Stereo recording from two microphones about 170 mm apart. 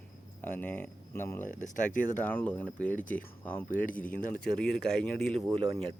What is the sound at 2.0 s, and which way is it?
Speech, 10° left (ahead or behind).